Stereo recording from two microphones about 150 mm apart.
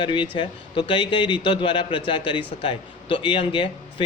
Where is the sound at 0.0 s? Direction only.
30° left (ahead or behind).